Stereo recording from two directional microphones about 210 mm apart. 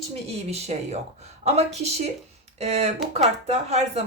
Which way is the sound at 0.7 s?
30° right (ahead or behind).